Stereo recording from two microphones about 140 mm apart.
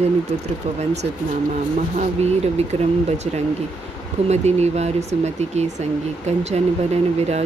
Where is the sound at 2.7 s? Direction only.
45° right (ahead or behind).